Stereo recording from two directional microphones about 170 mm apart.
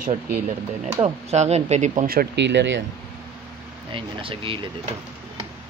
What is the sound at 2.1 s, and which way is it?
Speech, 75° right (ahead or behind).